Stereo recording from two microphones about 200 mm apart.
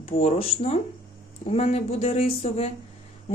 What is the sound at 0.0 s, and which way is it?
A woman's voice, 30° left (ahead or behind).